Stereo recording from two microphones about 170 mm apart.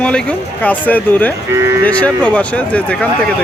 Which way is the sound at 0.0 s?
5° left (ahead or behind).